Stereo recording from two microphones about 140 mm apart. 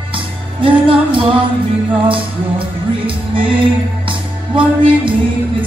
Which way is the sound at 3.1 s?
40° right (ahead or behind).